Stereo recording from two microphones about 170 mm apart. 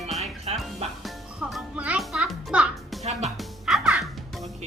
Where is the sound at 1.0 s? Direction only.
Centre (ahead or behind).